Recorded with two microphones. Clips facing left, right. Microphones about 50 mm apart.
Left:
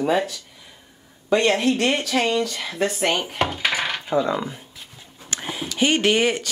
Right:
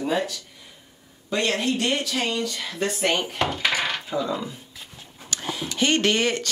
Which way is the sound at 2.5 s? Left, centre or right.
Centre.